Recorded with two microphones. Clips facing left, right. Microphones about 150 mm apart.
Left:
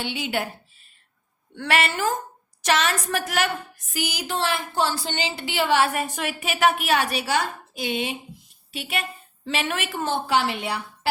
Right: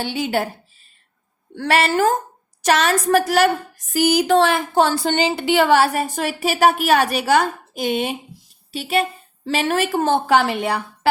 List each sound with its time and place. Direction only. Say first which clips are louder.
0.0 s a woman's voice: right 6 dB; 40° right (ahead or behind)
1.5 s a woman's voice: right 6 dB; 40° right (ahead or behind)
3.9 s a woman's voice: right 13 dB; 50° right (ahead or behind)
8.7 s a woman's voice: right 9 dB; 35° right (ahead or behind); by 11.1 s 55° right (ahead or behind)